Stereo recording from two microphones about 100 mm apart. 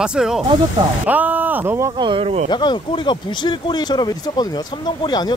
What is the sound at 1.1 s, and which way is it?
Speech, 15° right (ahead or behind).